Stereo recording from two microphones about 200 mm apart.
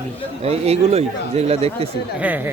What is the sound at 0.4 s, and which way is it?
Speech, 30° right (ahead or behind).